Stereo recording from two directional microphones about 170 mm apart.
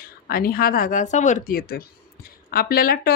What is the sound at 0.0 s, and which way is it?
Speech, 60° left (ahead or behind).